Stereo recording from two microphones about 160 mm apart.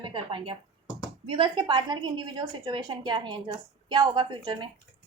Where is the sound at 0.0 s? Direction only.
30° right (ahead or behind).